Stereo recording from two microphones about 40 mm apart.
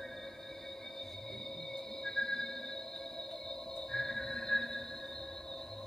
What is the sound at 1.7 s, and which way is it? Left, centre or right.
Music, centre.